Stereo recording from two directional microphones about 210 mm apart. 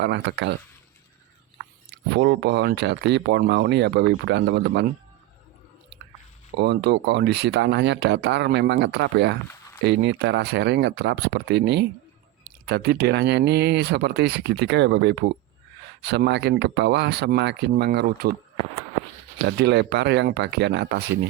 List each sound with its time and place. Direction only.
0.0 s speech: 55° right (ahead or behind)
2.1 s speech: 55° right (ahead or behind)
6.6 s speech: 50° right (ahead or behind)
19.5 s speech: 55° right (ahead or behind)